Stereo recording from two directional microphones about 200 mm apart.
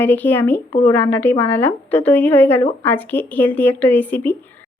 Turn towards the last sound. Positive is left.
turn(degrees=10)  # may be behind; listen again after turning